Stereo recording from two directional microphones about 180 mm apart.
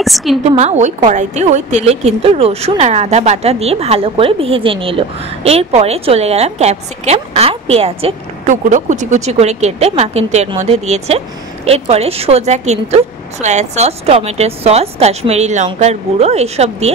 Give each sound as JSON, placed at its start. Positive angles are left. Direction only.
{"t": 0.0, "sound": "a woman's voice", "side_deg": 0}
{"t": 0.4, "sound": "a woman's voice", "side_deg": -35}